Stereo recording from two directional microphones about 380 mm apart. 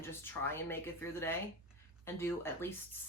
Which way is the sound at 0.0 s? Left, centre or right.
Centre.